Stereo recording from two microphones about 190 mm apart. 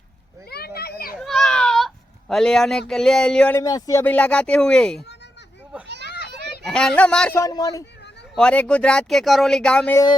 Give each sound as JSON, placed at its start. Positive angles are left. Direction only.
{"t": 0.5, "sound": "children playing", "side_deg": 55}
{"t": 1.1, "sound": "a sound", "side_deg": 0}
{"t": 3.6, "sound": "speech", "side_deg": 20}
{"t": 6.1, "sound": "children playing", "side_deg": 60}
{"t": 6.7, "sound": "speech", "side_deg": 5}
{"t": 8.4, "sound": "speech", "side_deg": 5}